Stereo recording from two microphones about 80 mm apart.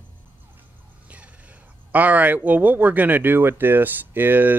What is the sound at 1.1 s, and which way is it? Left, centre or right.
Speech, centre.